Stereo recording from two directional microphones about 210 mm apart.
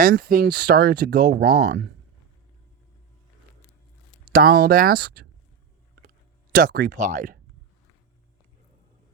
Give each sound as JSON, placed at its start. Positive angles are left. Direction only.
{"t": 0.0, "sound": "speech", "side_deg": -40}
{"t": 4.3, "sound": "speech", "side_deg": -45}
{"t": 6.5, "sound": "speech", "side_deg": -45}